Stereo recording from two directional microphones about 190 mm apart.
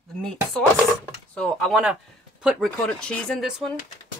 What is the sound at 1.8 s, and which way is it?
Speech, 5° right (ahead or behind).